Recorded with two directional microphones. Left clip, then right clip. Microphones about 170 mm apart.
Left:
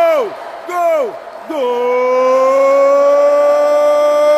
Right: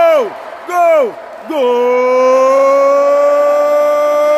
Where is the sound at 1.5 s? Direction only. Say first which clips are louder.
Right 3 dB; 25° right (ahead or behind); by 4.4 s centre (ahead or behind).